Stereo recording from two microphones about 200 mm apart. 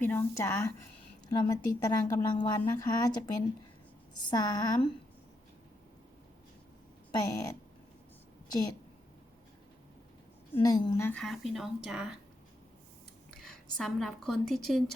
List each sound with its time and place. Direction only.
0.0 s a woman's voice: 10° left (ahead or behind)
4.2 s a woman's voice: 20° left (ahead or behind)
7.1 s speech: 20° left (ahead or behind)
10.6 s a woman's voice: 20° left (ahead or behind); by 12.1 s 5° right (ahead or behind)
13.4 s a woman's voice: centre (ahead or behind)